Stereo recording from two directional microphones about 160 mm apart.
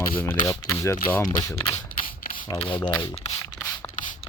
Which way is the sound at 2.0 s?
30° left (ahead or behind).